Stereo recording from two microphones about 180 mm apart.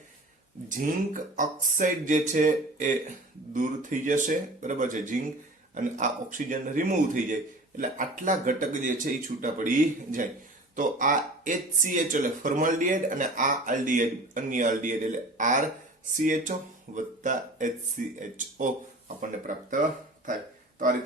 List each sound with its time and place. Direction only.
0.7 s speech: 45° right (ahead or behind)